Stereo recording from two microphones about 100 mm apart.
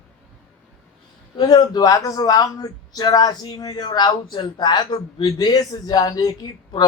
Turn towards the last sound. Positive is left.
turn(degrees=45)  # may be behind; listen again after turning